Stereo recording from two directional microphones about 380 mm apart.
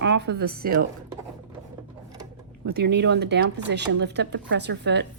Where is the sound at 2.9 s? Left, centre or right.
Right.